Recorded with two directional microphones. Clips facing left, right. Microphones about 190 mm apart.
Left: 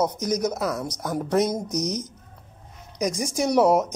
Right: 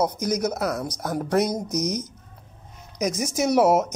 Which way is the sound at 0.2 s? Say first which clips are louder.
Even; 15° left (ahead or behind).